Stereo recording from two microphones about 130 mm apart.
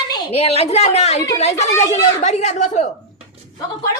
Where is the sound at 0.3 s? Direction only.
50° left (ahead or behind).